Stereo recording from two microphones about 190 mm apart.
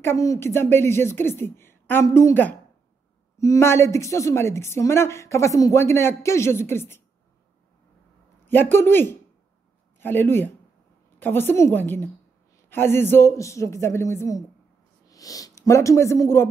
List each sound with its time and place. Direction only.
0.0 s a woman's voice: 15° left (ahead or behind)
8.5 s a woman's voice: 10° left (ahead or behind)